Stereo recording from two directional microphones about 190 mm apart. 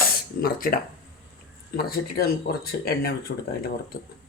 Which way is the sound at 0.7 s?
50° left (ahead or behind).